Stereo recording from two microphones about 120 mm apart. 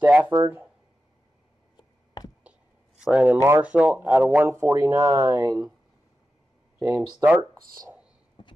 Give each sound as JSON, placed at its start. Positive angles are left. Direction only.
{"t": 0.0, "sound": "speech", "side_deg": -15}
{"t": 3.0, "sound": "speech", "side_deg": -10}
{"t": 3.3, "sound": "speech", "side_deg": -20}
{"t": 3.6, "sound": "speech", "side_deg": -10}
{"t": 4.5, "sound": "speech", "side_deg": -20}
{"t": 6.8, "sound": "speech", "side_deg": -25}
{"t": 8.4, "sound": "clip-clop", "side_deg": 40}